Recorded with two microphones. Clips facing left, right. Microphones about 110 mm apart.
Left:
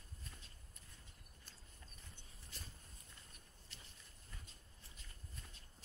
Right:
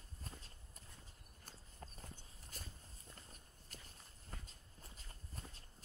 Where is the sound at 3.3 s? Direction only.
40° right (ahead or behind).